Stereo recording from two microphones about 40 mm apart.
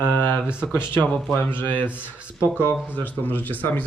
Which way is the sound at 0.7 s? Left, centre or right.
Left.